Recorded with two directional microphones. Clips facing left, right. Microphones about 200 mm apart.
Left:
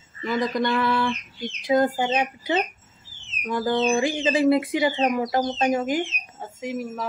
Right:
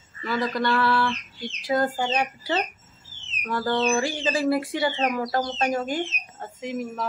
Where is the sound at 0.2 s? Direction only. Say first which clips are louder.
Left 2 dB; 15° left (ahead or behind).